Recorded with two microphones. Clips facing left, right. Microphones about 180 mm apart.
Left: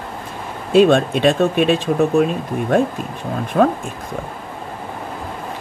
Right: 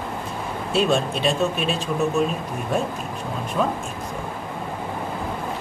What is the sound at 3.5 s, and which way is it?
Speech, 65° left (ahead or behind).